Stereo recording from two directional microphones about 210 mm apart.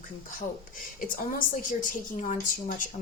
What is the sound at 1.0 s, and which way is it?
A woman's voice, 45° left (ahead or behind).